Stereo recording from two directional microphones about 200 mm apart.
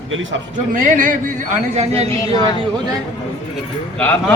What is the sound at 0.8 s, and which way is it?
Speech, 40° right (ahead or behind).